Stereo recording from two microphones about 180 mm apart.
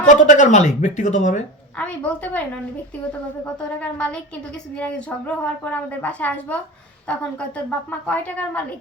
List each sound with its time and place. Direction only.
0.0 s speech: 45° left (ahead or behind)
1.8 s a woman's voice: 5° left (ahead or behind)
3.6 s a woman's voice: 5° left (ahead or behind)